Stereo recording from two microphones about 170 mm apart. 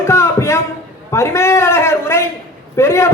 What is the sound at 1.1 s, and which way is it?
A man's voice, 15° left (ahead or behind).